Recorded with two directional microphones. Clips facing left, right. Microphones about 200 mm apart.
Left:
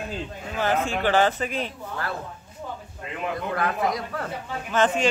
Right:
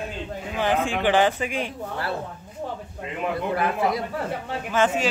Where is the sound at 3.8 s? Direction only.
25° right (ahead or behind).